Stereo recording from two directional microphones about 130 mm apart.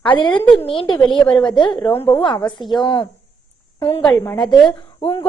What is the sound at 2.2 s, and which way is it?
Speech, 35° left (ahead or behind).